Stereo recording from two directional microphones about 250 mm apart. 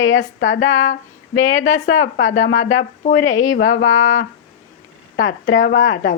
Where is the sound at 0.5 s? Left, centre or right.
Left.